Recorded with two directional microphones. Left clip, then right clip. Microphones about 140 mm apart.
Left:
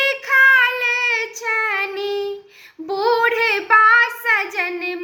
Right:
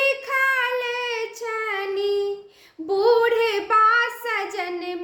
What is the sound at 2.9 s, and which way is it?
Child singing, 45° right (ahead or behind).